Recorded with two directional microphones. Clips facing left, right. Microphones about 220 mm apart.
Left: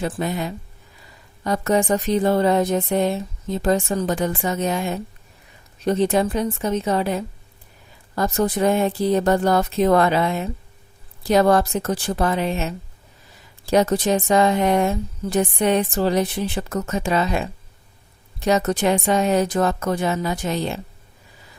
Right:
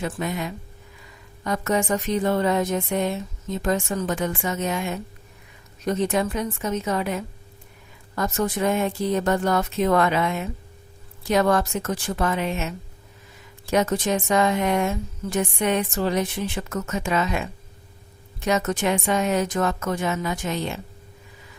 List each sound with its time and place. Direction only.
0.0 s speech: 35° left (ahead or behind)